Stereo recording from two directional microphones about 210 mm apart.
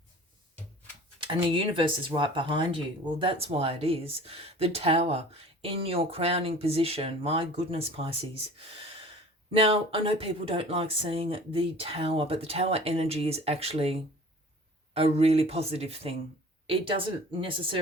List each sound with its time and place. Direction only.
1.5 s speech: 25° right (ahead or behind)
9.5 s speech: 25° right (ahead or behind)